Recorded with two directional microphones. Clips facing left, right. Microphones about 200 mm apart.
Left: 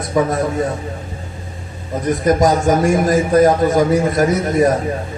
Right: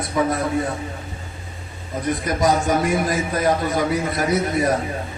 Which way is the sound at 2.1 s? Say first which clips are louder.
Left 6 dB; 45° left (ahead or behind).